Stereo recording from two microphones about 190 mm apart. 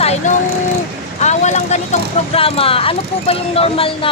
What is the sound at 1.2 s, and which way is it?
Speech, 35° left (ahead or behind).